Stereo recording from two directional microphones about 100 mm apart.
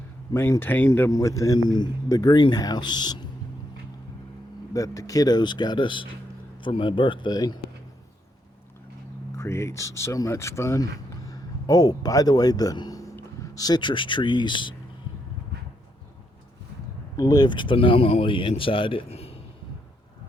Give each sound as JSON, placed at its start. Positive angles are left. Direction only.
{"t": 0.3, "sound": "speech", "side_deg": 25}
{"t": 1.1, "sound": "a man's voice", "side_deg": 30}
{"t": 4.7, "sound": "a man's voice", "side_deg": 35}
{"t": 9.3, "sound": "a man's voice", "side_deg": 30}
{"t": 17.2, "sound": "speech", "side_deg": 40}